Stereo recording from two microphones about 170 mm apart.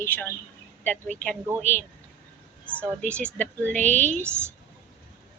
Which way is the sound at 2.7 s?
10° left (ahead or behind).